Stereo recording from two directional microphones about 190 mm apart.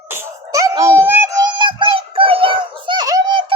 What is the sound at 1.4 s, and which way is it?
Synthetic singing, 25° right (ahead or behind).